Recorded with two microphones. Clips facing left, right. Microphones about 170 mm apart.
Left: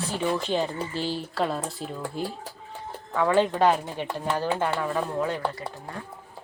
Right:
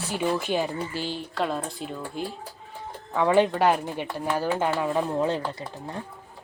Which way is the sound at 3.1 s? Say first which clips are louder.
Right 1 dB; 15° right (ahead or behind).